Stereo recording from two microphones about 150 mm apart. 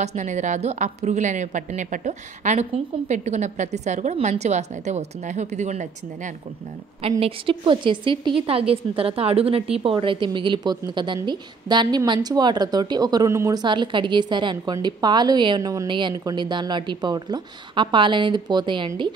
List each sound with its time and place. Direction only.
0.0 s a woman's voice: 50° right (ahead or behind)
7.0 s a woman's voice: 40° right (ahead or behind)